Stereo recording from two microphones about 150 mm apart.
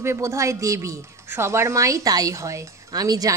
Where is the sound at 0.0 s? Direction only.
20° right (ahead or behind).